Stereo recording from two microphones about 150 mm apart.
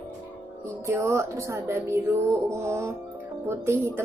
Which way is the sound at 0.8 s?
20° right (ahead or behind).